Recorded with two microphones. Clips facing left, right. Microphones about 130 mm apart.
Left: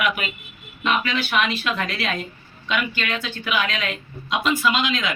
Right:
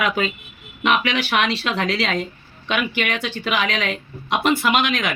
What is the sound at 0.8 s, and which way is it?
Speech, 75° right (ahead or behind).